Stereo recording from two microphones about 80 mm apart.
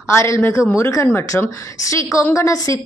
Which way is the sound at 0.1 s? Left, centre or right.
Left.